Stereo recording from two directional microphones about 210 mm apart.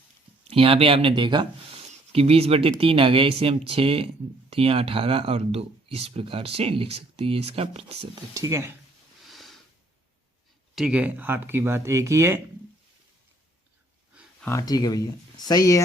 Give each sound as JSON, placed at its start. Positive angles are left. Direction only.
{"t": 0.4, "sound": "speech", "side_deg": -25}
{"t": 8.3, "sound": "speech", "side_deg": -15}
{"t": 9.2, "sound": "a sound", "side_deg": 0}
{"t": 10.8, "sound": "speech", "side_deg": -5}
{"t": 14.4, "sound": "speech", "side_deg": 15}